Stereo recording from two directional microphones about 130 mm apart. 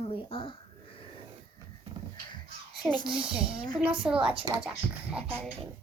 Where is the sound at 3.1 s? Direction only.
5° right (ahead or behind).